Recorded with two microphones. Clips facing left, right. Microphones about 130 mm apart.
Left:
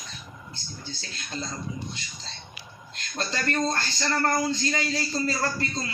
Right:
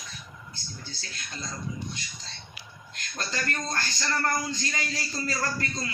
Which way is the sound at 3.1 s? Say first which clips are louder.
Left 5 dB; 30° left (ahead or behind).